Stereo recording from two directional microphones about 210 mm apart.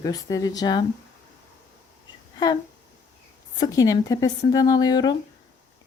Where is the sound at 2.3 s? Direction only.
20° left (ahead or behind).